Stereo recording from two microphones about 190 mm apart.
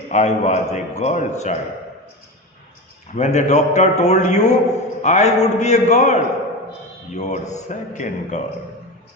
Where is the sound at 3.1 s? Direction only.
35° left (ahead or behind).